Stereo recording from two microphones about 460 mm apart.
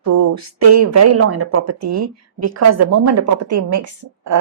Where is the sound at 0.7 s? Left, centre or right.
Right.